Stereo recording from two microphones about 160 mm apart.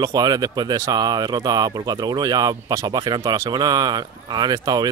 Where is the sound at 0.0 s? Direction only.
25° right (ahead or behind).